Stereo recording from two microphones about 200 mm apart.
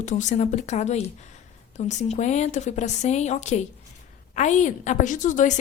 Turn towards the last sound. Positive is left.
turn(degrees=40)  # may be behind; listen again after turning